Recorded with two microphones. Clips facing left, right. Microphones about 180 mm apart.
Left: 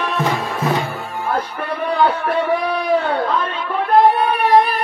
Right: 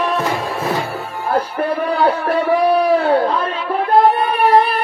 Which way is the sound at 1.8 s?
35° right (ahead or behind).